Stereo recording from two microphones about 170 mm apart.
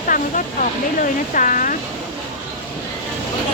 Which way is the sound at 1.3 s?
50° left (ahead or behind).